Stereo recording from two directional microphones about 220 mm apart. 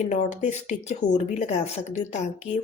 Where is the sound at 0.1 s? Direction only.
35° left (ahead or behind).